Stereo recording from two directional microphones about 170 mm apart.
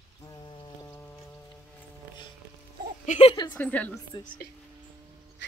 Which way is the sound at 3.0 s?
40° left (ahead or behind).